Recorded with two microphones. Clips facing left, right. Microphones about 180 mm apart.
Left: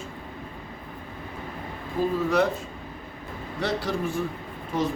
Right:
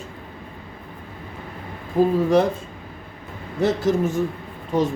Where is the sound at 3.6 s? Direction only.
45° right (ahead or behind).